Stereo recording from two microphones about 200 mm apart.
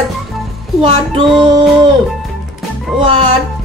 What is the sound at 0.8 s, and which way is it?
Music, 25° right (ahead or behind).